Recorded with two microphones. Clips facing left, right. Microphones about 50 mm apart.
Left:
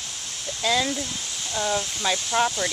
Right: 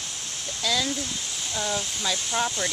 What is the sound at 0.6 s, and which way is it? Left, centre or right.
Speech, left.